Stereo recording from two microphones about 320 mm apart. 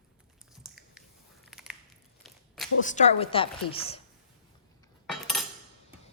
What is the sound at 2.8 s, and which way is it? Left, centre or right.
A woman's voice, left.